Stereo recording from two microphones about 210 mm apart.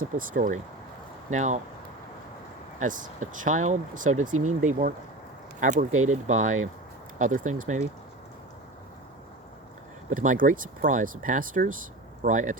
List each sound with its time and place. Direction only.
0.0 s speech: 40° right (ahead or behind)
2.8 s speech: 40° right (ahead or behind)
10.1 s speech: 40° right (ahead or behind)